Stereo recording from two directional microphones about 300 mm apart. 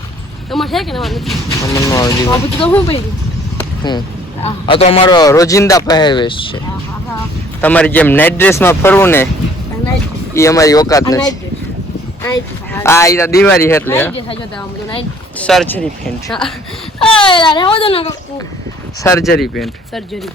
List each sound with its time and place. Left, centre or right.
0.5 s speech: centre
1.7 s a man's voice: centre
3.6 s a sound: centre
4.4 s a man's voice: centre
7.6 s a man's voice: centre
10.3 s a man's voice: centre
12.7 s a man's voice: centre
15.4 s speech: centre
17.0 s a man's voice: centre